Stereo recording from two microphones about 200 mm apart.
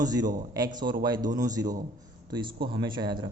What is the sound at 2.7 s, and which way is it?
Speech, 25° right (ahead or behind).